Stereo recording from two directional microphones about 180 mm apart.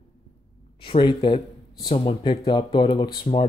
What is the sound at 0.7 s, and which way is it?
Speech, 30° left (ahead or behind).